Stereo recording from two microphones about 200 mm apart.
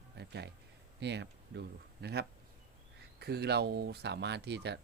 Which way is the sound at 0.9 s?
60° right (ahead or behind).